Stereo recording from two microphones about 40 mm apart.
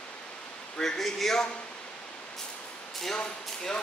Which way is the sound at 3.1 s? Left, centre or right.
Left.